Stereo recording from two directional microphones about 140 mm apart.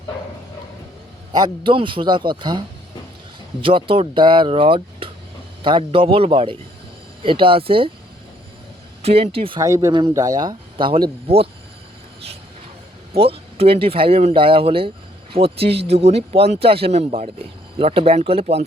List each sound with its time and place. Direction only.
1.3 s speech: 35° right (ahead or behind)
9.0 s speech: 45° right (ahead or behind)
9.6 s speech: 25° right (ahead or behind); by 11.4 s 40° right (ahead or behind)
13.1 s speech: 45° right (ahead or behind)